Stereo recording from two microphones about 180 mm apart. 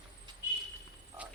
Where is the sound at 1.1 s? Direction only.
15° right (ahead or behind).